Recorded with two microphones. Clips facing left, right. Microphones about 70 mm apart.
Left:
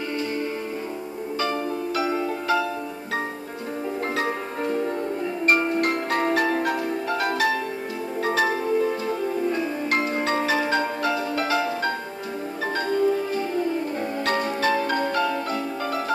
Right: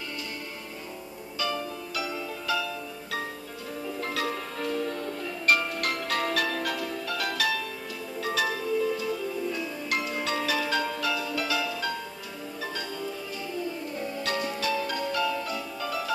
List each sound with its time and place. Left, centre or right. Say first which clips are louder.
1.4 s music: left 5 dB; left
4.1 s music: left 5 dB; left